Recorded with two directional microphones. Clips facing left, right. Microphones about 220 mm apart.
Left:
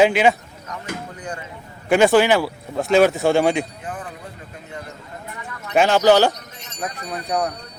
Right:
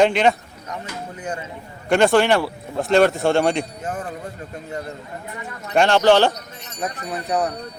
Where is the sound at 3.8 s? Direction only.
45° right (ahead or behind).